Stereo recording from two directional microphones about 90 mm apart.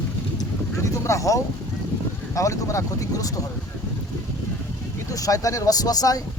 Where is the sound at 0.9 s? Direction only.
35° left (ahead or behind).